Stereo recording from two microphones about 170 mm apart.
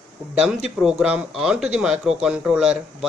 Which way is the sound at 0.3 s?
5° right (ahead or behind).